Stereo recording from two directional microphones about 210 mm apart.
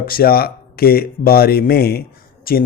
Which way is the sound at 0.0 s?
45° left (ahead or behind).